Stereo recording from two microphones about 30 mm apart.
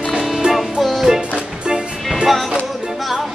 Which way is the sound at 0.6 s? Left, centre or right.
Centre.